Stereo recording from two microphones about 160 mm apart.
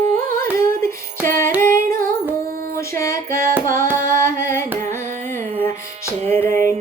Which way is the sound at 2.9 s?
20° left (ahead or behind).